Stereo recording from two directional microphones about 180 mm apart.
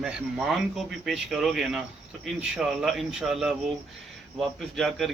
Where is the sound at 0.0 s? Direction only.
5° right (ahead or behind).